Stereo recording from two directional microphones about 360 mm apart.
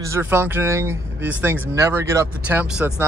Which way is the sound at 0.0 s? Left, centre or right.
Centre.